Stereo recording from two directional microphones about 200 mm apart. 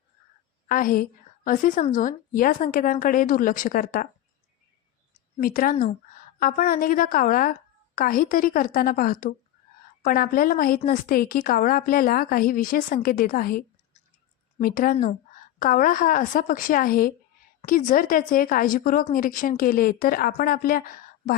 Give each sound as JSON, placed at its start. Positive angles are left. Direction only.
{"t": 0.7, "sound": "a woman's voice", "side_deg": 45}
{"t": 5.4, "sound": "a woman's voice", "side_deg": 45}